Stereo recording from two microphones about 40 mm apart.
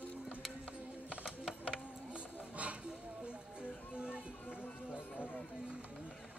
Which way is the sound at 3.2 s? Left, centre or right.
Right.